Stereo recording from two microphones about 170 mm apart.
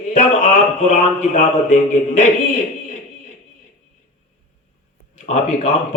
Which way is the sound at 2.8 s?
45° left (ahead or behind).